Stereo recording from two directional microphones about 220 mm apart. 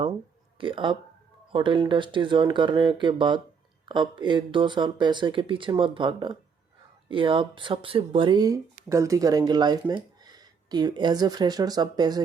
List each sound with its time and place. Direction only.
0.6 s speech: 25° right (ahead or behind)